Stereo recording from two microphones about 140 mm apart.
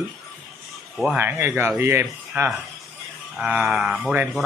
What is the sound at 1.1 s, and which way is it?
Speech, 15° right (ahead or behind).